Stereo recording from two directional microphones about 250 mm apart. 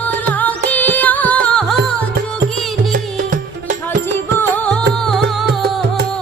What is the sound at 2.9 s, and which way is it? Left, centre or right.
Music, right.